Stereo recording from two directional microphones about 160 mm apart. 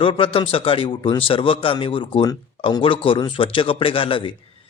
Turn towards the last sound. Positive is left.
turn(degrees=35)  # may be behind; listen again after turning